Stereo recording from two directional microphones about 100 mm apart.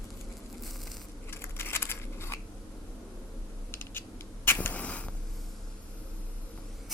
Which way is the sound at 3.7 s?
20° left (ahead or behind).